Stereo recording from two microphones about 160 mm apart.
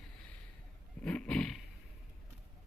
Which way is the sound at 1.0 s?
5° left (ahead or behind).